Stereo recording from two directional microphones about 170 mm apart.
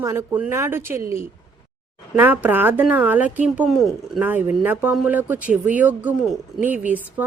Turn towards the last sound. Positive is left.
turn(degrees=-10)  # may be behind; listen again after turning